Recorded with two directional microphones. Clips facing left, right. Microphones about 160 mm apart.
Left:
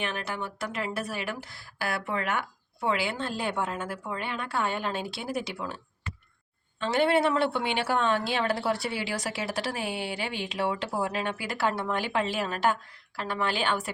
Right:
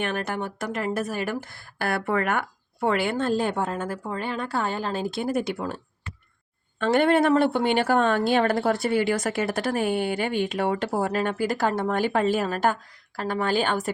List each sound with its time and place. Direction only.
0.0 s a woman's voice: 50° right (ahead or behind)
6.7 s a woman's voice: 55° right (ahead or behind)